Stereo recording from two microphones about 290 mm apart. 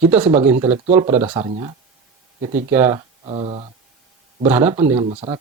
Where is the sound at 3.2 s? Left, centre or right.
Centre.